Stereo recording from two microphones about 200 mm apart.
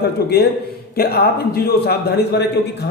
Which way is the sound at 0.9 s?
50° left (ahead or behind).